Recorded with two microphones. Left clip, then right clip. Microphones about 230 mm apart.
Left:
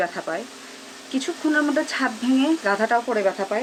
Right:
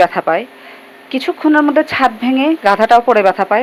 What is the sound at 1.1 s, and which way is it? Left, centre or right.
Speech, right.